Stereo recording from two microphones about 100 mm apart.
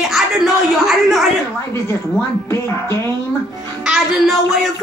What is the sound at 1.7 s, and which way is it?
A woman's voice, 25° left (ahead or behind).